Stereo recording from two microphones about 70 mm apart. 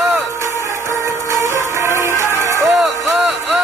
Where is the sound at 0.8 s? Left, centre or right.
Right.